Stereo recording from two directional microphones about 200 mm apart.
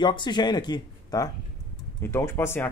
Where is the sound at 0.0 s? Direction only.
25° left (ahead or behind).